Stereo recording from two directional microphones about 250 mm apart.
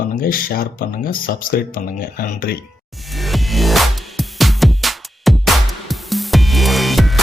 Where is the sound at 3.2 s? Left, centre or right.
Centre.